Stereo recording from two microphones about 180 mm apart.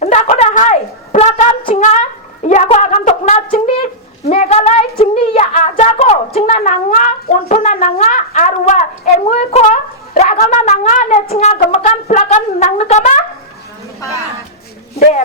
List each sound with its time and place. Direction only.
0.0 s a sound: 40° left (ahead or behind)
10.4 s wind instrument: 40° left (ahead or behind)
11.7 s brass instrument: 40° left (ahead or behind)